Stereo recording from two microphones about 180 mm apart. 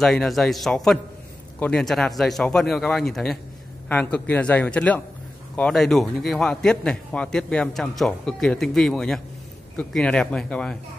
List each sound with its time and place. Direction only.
0.0 s a man's voice: 5° left (ahead or behind)